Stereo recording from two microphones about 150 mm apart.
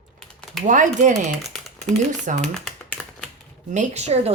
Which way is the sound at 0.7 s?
55° right (ahead or behind).